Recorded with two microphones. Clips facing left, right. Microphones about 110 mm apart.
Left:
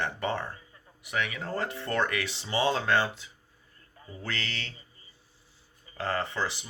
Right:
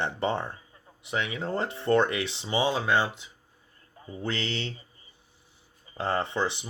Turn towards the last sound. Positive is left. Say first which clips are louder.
# right 3 dB
turn(degrees=-25)  # may be behind; listen again after turning